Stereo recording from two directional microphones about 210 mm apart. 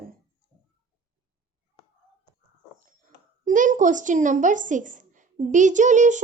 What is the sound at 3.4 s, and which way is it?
A woman's voice, 40° right (ahead or behind).